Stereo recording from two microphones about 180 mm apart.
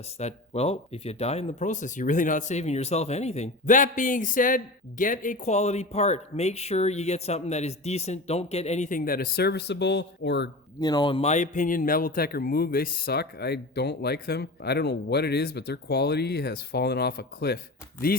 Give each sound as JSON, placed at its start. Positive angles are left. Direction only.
{"t": 0.2, "sound": "speech", "side_deg": 35}
{"t": 10.8, "sound": "speech", "side_deg": 20}